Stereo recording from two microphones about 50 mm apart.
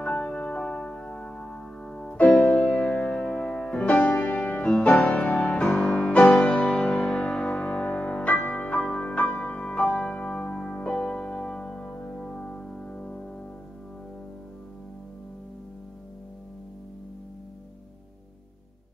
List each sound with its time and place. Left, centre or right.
0.0 s music: left
2.5 s music: left; by 12.8 s centre
12.9 s music: left